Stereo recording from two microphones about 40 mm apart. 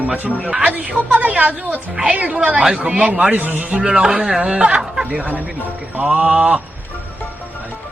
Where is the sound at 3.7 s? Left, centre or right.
Right.